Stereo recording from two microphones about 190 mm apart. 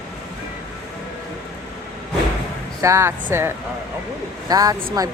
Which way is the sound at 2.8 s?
15° right (ahead or behind).